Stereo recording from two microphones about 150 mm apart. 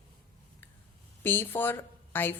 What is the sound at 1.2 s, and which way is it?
Speech, 15° left (ahead or behind).